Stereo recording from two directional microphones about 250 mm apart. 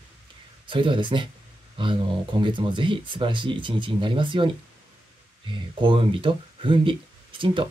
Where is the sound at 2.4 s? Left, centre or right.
Centre.